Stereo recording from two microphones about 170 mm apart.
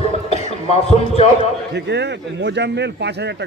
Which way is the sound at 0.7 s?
35° left (ahead or behind).